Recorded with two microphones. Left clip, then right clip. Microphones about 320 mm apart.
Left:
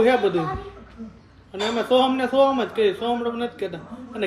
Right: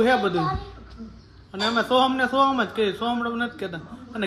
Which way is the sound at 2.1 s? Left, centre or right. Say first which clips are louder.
Left 1 dB; centre.